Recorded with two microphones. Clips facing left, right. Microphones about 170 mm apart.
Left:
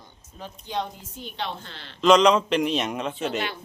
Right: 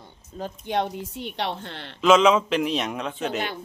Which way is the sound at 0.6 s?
60° right (ahead or behind).